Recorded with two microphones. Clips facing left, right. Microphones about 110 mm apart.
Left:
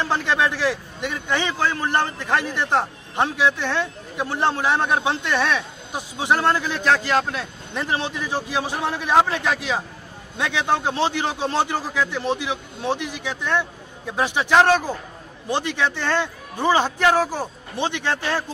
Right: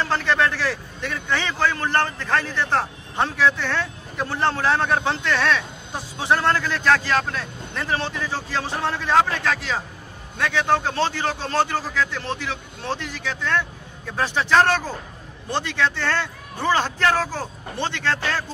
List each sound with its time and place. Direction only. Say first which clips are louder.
0.0 s a man's voice: even; 15° left (ahead or behind)